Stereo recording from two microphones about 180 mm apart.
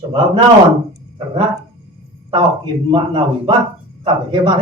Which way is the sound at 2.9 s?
30° right (ahead or behind).